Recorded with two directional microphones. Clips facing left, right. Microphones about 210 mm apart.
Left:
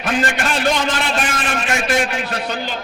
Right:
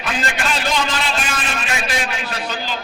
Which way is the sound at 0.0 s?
50° left (ahead or behind).